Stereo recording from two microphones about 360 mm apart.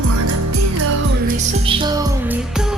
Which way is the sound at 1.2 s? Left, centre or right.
Centre.